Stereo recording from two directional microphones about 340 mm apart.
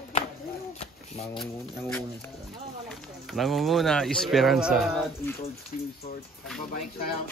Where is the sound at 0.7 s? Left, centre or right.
Centre.